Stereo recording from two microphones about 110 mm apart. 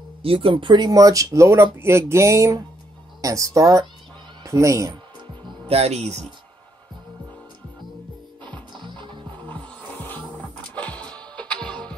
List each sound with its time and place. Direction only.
0.2 s a woman's voice: 55° right (ahead or behind); by 4.9 s 30° right (ahead or behind)
5.7 s speech: 70° right (ahead or behind)
8.5 s music: 45° right (ahead or behind)
9.8 s music: 15° left (ahead or behind)